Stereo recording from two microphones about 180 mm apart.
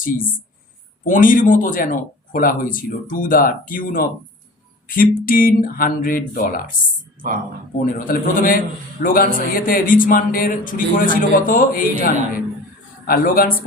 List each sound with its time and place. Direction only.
0.0 s speech: 50° left (ahead or behind)
7.8 s speech: 50° left (ahead or behind)